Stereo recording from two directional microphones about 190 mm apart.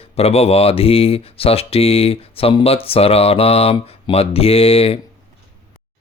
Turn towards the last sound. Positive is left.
turn(degrees=30)  # may be behind; listen again after turning